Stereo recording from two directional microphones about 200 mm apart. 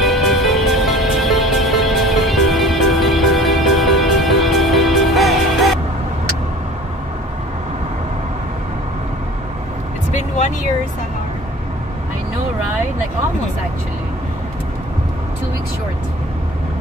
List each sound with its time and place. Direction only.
0.0 s music: centre (ahead or behind)
10.1 s vehicle: 35° left (ahead or behind)